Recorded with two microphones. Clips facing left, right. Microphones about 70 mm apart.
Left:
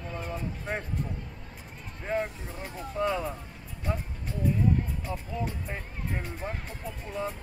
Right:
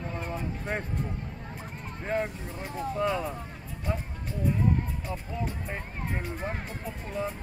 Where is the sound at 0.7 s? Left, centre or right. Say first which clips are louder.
Right 1 dB; centre.